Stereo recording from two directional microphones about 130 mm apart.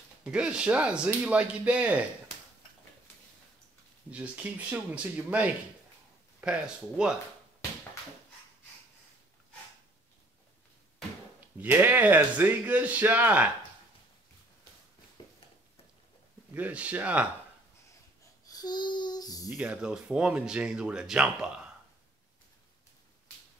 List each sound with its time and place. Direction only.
0.2 s speech: 10° right (ahead or behind)
4.1 s speech: 10° right (ahead or behind)
11.6 s speech: 15° right (ahead or behind)
15.2 s a sound: 30° left (ahead or behind)
16.5 s speech: 10° right (ahead or behind)
18.5 s a child's voice: 30° left (ahead or behind)
19.5 s speech: 10° right (ahead or behind)